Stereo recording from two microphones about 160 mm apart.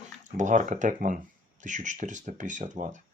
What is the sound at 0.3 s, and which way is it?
Speech, 50° right (ahead or behind).